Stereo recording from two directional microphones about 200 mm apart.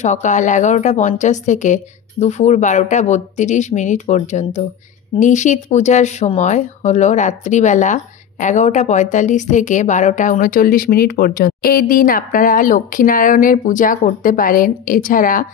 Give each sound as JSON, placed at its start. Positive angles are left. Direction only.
{"t": 0.0, "sound": "speech", "side_deg": 35}